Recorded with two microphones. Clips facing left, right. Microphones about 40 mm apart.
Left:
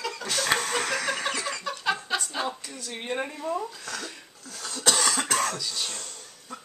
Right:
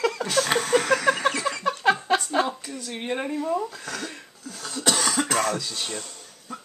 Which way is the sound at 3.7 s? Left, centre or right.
Centre.